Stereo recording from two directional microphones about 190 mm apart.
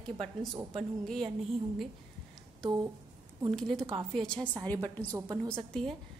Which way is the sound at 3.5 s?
Centre (ahead or behind).